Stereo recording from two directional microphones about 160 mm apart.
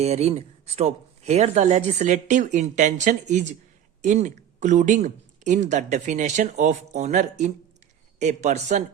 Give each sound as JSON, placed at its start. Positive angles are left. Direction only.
{"t": 0.0, "sound": "speech", "side_deg": -40}